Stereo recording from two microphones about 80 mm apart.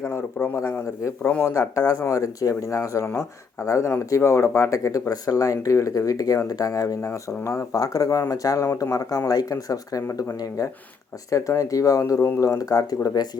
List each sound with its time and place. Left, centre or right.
0.0 s a man's voice: left
7.8 s speech: left